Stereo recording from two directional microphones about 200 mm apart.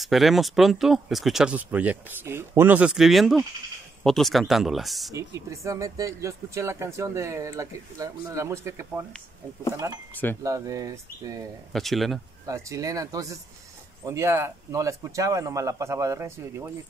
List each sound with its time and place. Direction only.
0.0 s speech: centre (ahead or behind)
5.1 s speech: 15° right (ahead or behind)
10.4 s speech: 15° right (ahead or behind)
11.7 s speech: centre (ahead or behind)
12.4 s speech: 15° right (ahead or behind)